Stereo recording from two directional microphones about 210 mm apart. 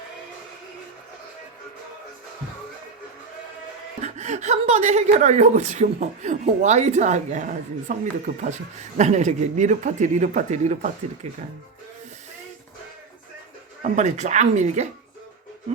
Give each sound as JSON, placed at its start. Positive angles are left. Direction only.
{"t": 4.0, "sound": "a woman's voice", "side_deg": -35}
{"t": 13.8, "sound": "a woman's voice", "side_deg": -35}